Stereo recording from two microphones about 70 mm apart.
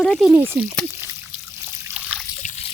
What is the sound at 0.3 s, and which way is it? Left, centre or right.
Speech, right.